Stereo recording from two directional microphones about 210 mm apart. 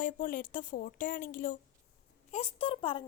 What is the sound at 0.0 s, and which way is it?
A woman's voice, 40° left (ahead or behind).